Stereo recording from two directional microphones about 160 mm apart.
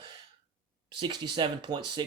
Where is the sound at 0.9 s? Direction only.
30° right (ahead or behind).